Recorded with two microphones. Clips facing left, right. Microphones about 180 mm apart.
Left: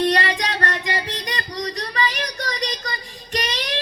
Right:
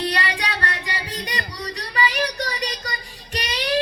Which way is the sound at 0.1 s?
40° left (ahead or behind).